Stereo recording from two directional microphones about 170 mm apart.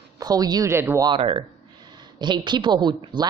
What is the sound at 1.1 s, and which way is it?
Speech, 35° right (ahead or behind).